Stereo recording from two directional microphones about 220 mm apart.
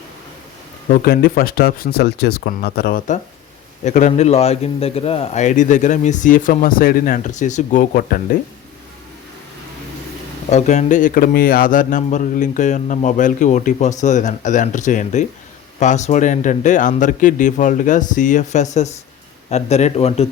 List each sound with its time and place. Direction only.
0.9 s speech: 45° left (ahead or behind)
10.5 s speech: 30° left (ahead or behind)